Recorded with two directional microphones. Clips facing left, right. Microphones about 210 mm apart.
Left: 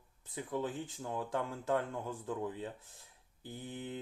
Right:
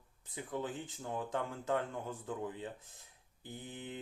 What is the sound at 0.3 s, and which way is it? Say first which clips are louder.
Speech: left 2 dB; 15° right (ahead or behind).